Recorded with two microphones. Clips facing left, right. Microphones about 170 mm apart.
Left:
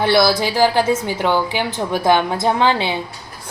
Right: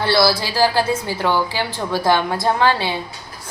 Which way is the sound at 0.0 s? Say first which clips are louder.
Left 2 dB; 20° left (ahead or behind).